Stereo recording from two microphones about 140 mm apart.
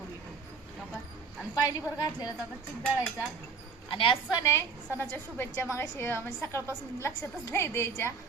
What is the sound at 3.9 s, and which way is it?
Speech, 40° left (ahead or behind).